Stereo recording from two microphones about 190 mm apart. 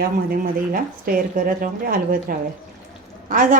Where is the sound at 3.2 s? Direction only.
45° right (ahead or behind).